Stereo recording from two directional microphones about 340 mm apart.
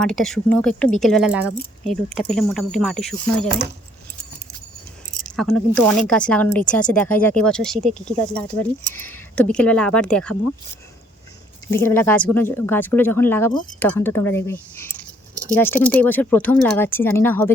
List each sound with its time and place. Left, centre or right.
0.0 s speech: centre
5.2 s speech: centre
11.7 s speech: centre